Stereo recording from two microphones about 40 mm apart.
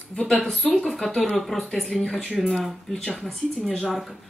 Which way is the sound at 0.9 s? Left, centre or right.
Centre.